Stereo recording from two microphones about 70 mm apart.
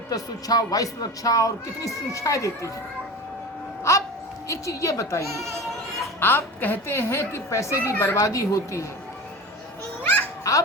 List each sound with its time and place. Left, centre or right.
0.1 s speech: left
3.9 s a sound: left
4.4 s speech: left
5.2 s speech: right
6.1 s a woman's voice: left
10.5 s speech: left